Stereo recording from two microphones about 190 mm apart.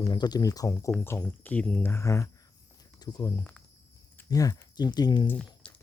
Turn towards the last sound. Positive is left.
turn(degrees=5)  # may be behind; listen again after turning